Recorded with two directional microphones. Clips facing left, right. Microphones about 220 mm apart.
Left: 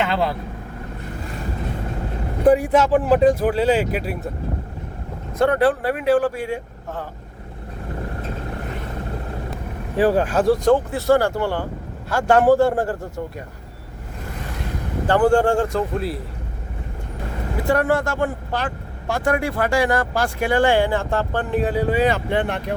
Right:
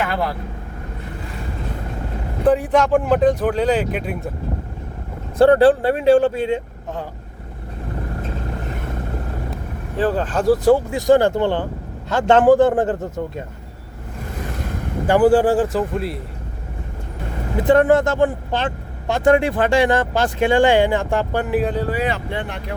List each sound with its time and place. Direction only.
0.0 s speech: 25° left (ahead or behind)
2.5 s speech: 10° left (ahead or behind)
5.4 s speech: 30° right (ahead or behind)
10.0 s speech: 15° left (ahead or behind)
10.4 s speech: 5° right (ahead or behind); by 13.4 s 20° right (ahead or behind)
15.0 s speech: 10° right (ahead or behind)
17.7 s speech: 20° right (ahead or behind)
21.6 s speech: 5° left (ahead or behind)
22.3 s speech: 60° left (ahead or behind)